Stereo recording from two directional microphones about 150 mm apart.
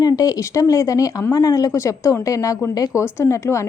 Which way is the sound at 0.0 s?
25° left (ahead or behind).